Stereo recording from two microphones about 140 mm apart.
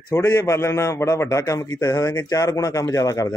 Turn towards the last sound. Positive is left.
turn(degrees=25)  # may be behind; listen again after turning